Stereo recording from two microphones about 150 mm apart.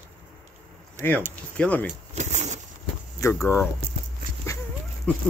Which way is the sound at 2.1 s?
50° right (ahead or behind).